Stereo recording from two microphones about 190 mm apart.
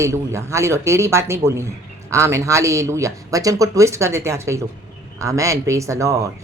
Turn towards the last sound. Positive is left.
turn(degrees=-15)  # may be behind; listen again after turning